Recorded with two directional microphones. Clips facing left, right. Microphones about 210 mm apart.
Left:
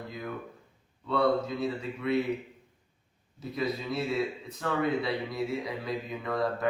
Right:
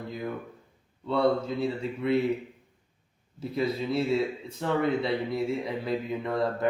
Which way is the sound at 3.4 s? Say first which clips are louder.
Right 4 dB; 30° right (ahead or behind).